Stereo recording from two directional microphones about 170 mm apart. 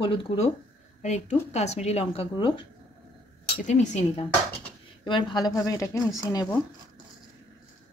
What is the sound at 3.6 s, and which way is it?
Speech, 45° left (ahead or behind).